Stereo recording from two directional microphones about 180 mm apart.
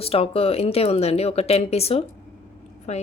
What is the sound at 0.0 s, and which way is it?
Speech, 30° left (ahead or behind).